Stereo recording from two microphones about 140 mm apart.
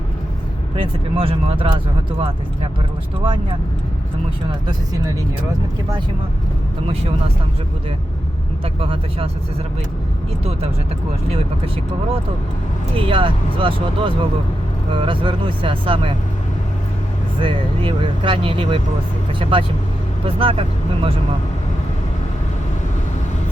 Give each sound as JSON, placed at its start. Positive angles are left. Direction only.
{"t": 0.8, "sound": "speech", "side_deg": -40}
{"t": 8.8, "sound": "speech", "side_deg": -40}
{"t": 13.0, "sound": "speech", "side_deg": -40}
{"t": 17.4, "sound": "speech", "side_deg": -40}